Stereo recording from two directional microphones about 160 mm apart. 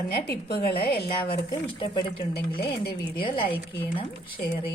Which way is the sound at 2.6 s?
90° left.